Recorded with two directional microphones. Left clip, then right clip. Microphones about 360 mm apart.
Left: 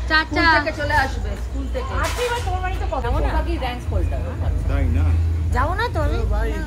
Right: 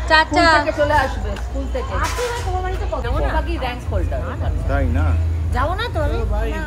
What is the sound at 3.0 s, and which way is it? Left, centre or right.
Speech, centre.